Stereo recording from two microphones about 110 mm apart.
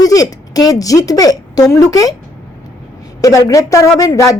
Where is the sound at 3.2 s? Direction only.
30° left (ahead or behind).